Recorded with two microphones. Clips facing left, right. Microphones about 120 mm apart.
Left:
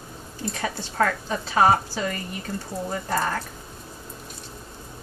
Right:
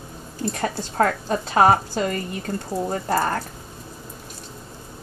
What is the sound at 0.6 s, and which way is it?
A woman's voice, 45° right (ahead or behind).